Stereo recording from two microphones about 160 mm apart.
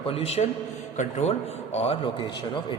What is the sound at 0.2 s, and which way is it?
A man's voice, 40° left (ahead or behind).